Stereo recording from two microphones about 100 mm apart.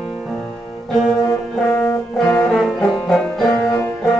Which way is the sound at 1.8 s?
20° left (ahead or behind).